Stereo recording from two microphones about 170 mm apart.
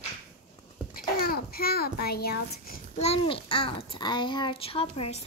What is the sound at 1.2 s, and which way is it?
A child's voice, 60° left (ahead or behind).